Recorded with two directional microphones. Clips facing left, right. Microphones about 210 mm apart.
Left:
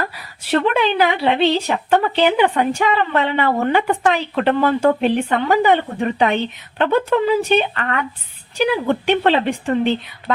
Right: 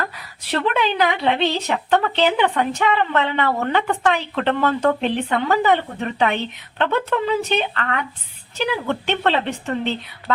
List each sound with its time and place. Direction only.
0.7 s speech: 5° left (ahead or behind)